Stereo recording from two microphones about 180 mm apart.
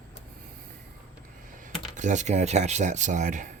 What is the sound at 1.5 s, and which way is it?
Speech, 45° right (ahead or behind).